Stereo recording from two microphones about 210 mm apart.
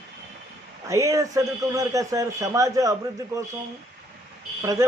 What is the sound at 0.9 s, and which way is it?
A man's voice, 15° right (ahead or behind).